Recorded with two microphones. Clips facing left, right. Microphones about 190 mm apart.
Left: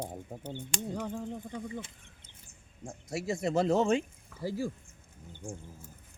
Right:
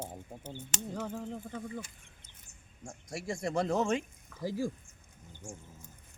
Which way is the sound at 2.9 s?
25° left (ahead or behind).